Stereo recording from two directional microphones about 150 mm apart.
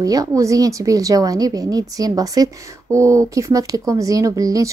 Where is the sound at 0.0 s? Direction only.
25° right (ahead or behind).